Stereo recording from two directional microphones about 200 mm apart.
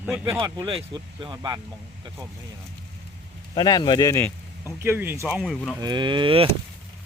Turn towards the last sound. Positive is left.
turn(degrees=-25)  # may be behind; listen again after turning